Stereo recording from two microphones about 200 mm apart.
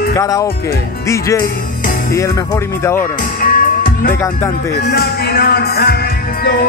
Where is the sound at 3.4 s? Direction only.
45° left (ahead or behind).